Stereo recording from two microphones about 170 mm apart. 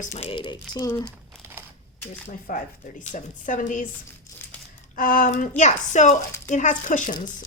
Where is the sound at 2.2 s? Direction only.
45° left (ahead or behind).